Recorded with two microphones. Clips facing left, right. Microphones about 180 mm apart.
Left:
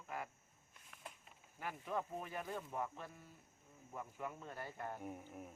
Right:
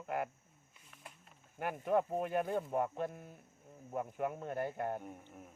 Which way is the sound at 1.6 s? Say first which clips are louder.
Right 10 dB; 60° right (ahead or behind).